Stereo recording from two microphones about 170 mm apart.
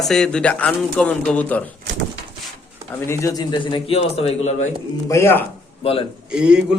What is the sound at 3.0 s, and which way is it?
A man's voice, 15° left (ahead or behind).